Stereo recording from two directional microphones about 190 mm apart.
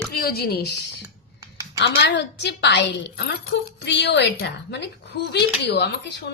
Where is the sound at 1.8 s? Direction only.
65° left (ahead or behind).